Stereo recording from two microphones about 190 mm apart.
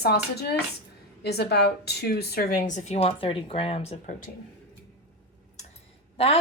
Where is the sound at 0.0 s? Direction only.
55° left (ahead or behind); by 4.1 s 35° left (ahead or behind).